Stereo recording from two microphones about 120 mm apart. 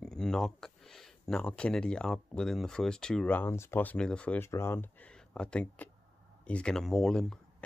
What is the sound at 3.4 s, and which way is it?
Speech, 20° left (ahead or behind).